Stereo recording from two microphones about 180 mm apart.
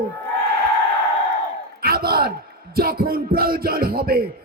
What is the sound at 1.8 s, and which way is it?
A man's voice, 55° right (ahead or behind).